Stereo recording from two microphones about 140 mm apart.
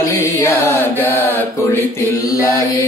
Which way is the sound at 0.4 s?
15° left (ahead or behind).